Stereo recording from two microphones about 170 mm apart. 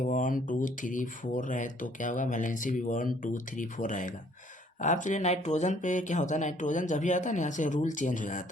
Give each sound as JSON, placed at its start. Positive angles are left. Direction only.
{"t": 0.0, "sound": "speech", "side_deg": 50}